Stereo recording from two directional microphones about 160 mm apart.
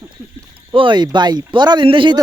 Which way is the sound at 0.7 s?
30° right (ahead or behind).